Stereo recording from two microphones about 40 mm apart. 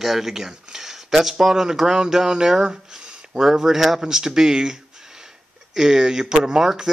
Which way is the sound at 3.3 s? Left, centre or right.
Centre.